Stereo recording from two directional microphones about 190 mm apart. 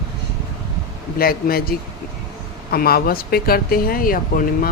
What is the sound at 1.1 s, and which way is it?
Speech, 50° left (ahead or behind).